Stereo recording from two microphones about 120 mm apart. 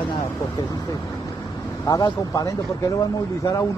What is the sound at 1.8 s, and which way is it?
Speech, 30° left (ahead or behind).